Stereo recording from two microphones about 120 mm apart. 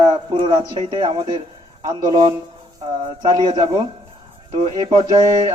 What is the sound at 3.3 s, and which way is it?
A man's voice, 35° right (ahead or behind).